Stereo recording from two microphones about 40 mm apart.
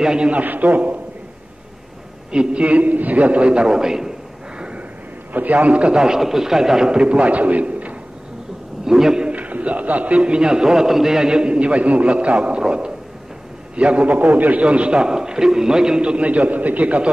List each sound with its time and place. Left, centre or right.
0.0 s a man's voice: centre
0.3 s a man's voice: right
2.3 s a man's voice: right
5.3 s a man's voice: right
5.9 s a man's voice: centre
7.1 s a man's voice: right
8.8 s a man's voice: centre
9.3 s a man's voice: right
14.0 s a man's voice: right
14.6 s a man's voice: right
15.0 s a man's voice: centre
16.0 s a man's voice: right